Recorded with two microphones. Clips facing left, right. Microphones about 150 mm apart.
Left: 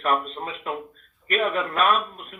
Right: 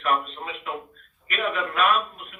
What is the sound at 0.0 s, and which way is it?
A man's voice, 40° left (ahead or behind).